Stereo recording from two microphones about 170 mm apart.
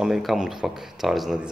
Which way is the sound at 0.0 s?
Centre (ahead or behind).